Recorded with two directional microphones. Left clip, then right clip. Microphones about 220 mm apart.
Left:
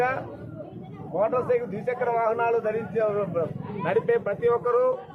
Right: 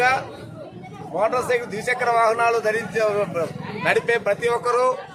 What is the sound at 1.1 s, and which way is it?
A man's voice, centre (ahead or behind).